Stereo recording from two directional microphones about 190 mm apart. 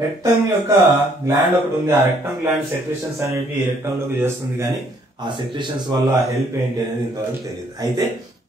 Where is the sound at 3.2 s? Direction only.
15° right (ahead or behind).